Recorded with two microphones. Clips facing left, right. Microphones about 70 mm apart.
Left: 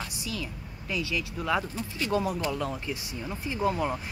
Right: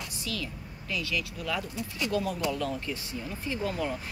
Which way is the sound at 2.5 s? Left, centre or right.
Centre.